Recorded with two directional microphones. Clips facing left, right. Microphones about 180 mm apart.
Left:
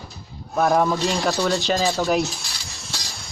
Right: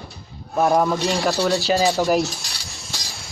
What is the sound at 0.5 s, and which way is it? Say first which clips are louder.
Speech: right 1 dB; 10° right (ahead or behind).